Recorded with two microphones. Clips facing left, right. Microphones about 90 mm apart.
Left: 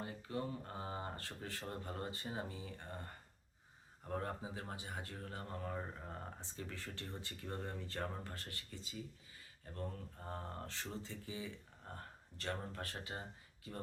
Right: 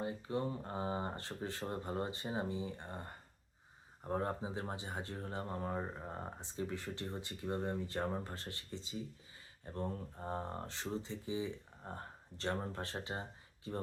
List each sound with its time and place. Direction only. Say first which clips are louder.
0.0 s speech: right 5 dB; 25° right (ahead or behind)